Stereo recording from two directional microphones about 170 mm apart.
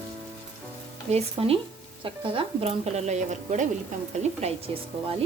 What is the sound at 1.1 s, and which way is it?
A woman's voice, 35° right (ahead or behind).